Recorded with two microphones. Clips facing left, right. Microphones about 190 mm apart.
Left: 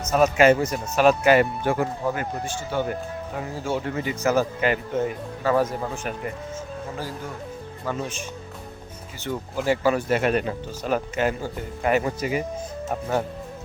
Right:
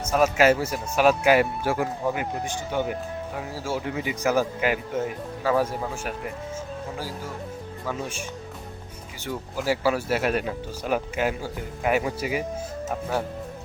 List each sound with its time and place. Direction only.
0.0 s speech: 10° right (ahead or behind)
7.9 s speech: 10° right (ahead or behind)
9.2 s speech: 5° right (ahead or behind)